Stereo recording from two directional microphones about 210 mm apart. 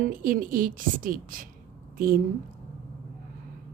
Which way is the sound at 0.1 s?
40° right (ahead or behind).